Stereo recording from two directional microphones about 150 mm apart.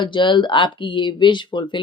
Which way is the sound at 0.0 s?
30° left (ahead or behind).